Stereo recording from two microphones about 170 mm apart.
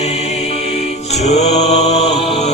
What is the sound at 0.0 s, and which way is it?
Mantra, 40° left (ahead or behind).